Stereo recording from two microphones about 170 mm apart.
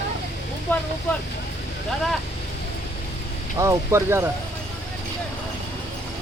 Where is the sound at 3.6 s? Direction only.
15° right (ahead or behind).